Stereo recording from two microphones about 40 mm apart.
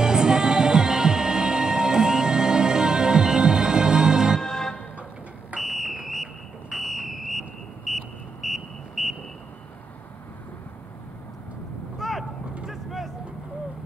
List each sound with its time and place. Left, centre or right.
0.0 s music: centre
4.4 s music: centre
5.6 s fire alarm: centre
6.8 s vehicle: centre
12.0 s vehicle: centre